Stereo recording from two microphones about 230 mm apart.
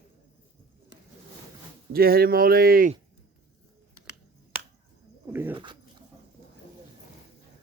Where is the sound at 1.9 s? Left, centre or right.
Right.